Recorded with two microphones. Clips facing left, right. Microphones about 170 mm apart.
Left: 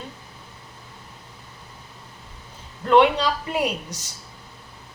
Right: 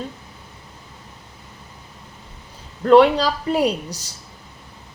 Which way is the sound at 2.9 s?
35° right (ahead or behind).